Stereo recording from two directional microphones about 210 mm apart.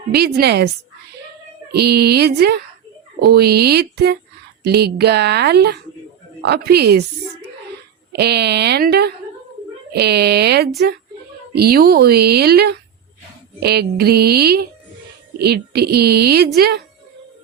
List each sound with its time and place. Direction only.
0.1 s speech: 50° right (ahead or behind)
1.7 s speech: 50° right (ahead or behind)
8.1 s speech: 50° right (ahead or behind)